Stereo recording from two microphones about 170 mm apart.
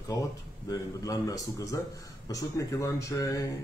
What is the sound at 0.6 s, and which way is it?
A man's voice, 20° left (ahead or behind).